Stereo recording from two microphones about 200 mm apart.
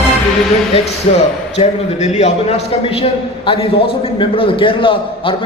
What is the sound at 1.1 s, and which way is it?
A man's voice, 35° left (ahead or behind).